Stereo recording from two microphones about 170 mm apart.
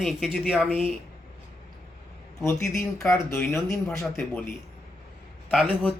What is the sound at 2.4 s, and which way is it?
Speech, 15° left (ahead or behind).